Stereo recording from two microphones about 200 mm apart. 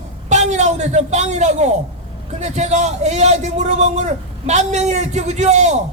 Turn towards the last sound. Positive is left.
turn(degrees=-35)  # may be behind; listen again after turning